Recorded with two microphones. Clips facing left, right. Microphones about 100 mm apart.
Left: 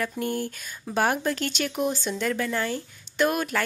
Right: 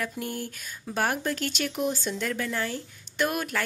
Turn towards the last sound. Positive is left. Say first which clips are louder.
# left 4 dB
turn(degrees=0)  # may be behind; listen again after turning